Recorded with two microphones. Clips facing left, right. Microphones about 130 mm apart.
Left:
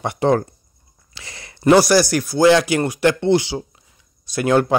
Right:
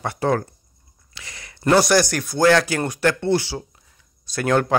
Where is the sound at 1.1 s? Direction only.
30° left (ahead or behind).